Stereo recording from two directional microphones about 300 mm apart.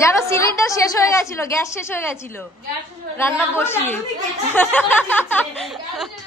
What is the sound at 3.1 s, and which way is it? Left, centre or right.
A woman's voice, centre.